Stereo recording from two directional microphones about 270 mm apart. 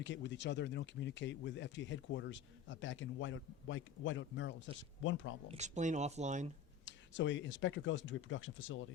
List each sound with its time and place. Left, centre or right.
0.0 s speech: left
5.5 s speech: right
6.8 s speech: left